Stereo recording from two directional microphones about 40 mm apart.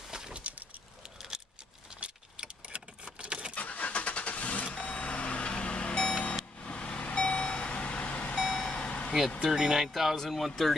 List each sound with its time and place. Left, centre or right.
0.3 s a sound: right
2.0 s vehicle: right
3.5 s vehicle: left
8.4 s vehicle: centre
8.7 s vehicle: left
9.6 s speech: centre
9.8 s speech: centre